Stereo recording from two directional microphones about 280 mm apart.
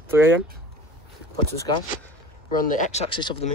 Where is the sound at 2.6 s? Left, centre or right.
Left.